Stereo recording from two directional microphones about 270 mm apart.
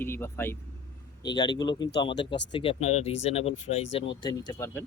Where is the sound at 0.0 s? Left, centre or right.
Centre.